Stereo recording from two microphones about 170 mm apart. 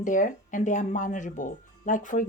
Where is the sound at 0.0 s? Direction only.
50° left (ahead or behind).